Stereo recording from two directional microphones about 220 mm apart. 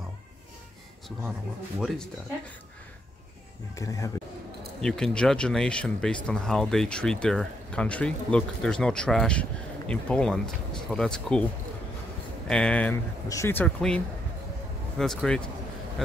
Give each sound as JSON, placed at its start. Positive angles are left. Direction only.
{"t": 3.7, "sound": "speech", "side_deg": 15}
{"t": 4.8, "sound": "speech", "side_deg": 0}
{"t": 12.4, "sound": "speech", "side_deg": 5}